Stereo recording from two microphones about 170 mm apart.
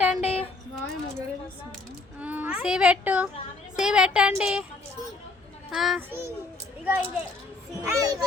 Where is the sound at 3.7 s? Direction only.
5° right (ahead or behind).